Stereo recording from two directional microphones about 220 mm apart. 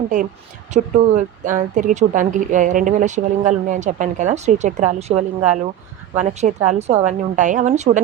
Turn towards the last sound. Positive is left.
turn(degrees=-30)  # may be behind; listen again after turning